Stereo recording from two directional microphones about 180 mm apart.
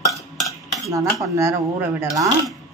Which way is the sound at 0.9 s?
15° right (ahead or behind).